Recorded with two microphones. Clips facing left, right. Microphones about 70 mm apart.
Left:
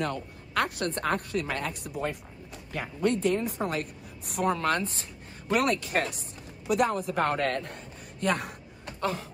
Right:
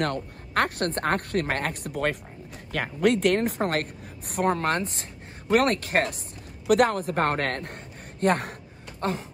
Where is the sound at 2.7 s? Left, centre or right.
Right.